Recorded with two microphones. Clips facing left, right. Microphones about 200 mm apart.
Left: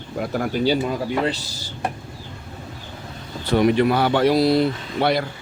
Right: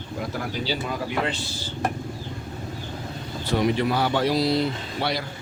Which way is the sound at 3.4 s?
60° left (ahead or behind).